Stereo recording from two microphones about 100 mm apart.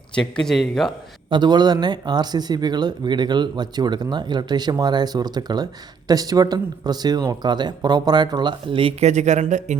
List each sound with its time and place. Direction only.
0.1 s speech: 10° left (ahead or behind)
1.3 s speech: 45° right (ahead or behind); by 9.5 s 75° right (ahead or behind)